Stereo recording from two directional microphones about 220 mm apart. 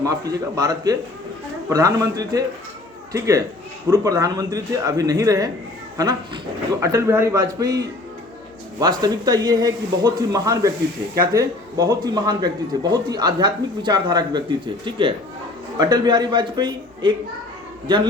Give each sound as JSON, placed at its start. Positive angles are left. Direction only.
{"t": 0.0, "sound": "speech", "side_deg": -15}